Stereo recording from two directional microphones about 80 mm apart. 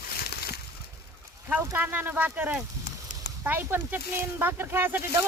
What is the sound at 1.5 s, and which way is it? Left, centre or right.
Speech, right.